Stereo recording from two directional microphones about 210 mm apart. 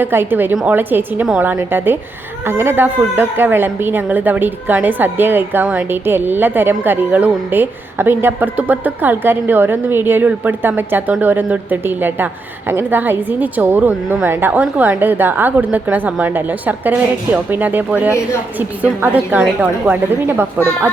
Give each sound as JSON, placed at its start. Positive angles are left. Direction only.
{"t": 0.0, "sound": "a woman's voice", "side_deg": -10}